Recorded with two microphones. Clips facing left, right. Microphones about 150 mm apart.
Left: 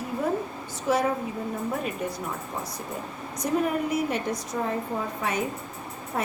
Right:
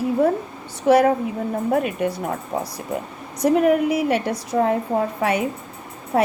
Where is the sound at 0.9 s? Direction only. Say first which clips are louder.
Right 9 dB; 65° right (ahead or behind).